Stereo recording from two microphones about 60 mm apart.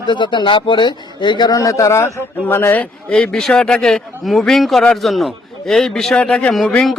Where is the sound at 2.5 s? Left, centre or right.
Left.